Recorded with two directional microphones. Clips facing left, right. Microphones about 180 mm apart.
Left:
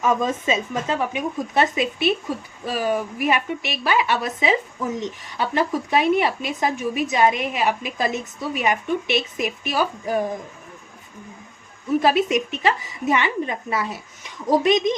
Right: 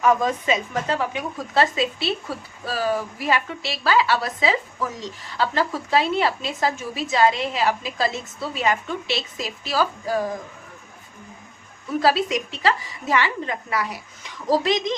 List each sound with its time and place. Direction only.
0.0 s speech: 20° left (ahead or behind)
12.0 s a woman's voice: 20° left (ahead or behind)